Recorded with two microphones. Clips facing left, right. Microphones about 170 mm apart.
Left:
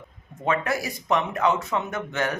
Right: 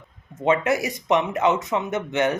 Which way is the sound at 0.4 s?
20° right (ahead or behind).